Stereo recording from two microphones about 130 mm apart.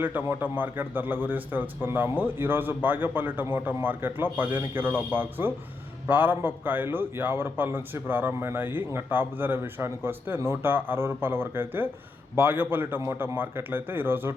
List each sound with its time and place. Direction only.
0.0 s a man's voice: 15° right (ahead or behind)